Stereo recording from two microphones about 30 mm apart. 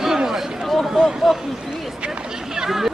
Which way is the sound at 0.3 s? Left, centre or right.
Centre.